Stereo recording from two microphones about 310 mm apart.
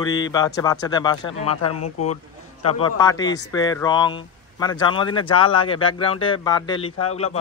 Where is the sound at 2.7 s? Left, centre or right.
Centre.